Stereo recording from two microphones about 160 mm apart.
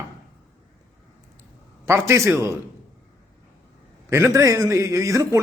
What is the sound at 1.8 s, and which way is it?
Speech, 15° right (ahead or behind).